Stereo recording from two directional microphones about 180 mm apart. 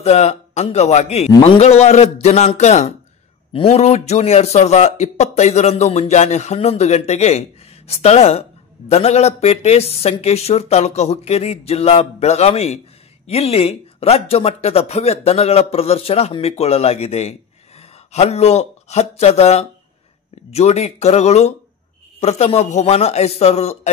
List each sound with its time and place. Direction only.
0.0 s a man's voice: 40° left (ahead or behind)